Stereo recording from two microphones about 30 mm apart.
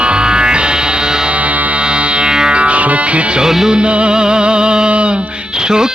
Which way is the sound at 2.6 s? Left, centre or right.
Right.